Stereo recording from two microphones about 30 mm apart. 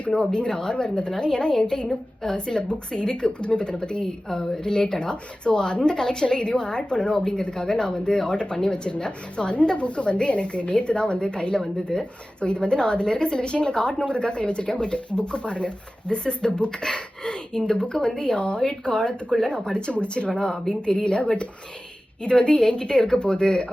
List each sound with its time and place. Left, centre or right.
0.1 s speech: left
6.2 s speech: left
7.5 s a woman's voice: left
19.9 s speech: left